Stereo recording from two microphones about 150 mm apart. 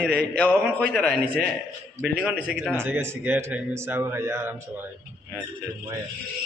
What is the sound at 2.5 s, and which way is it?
Speech, centre (ahead or behind).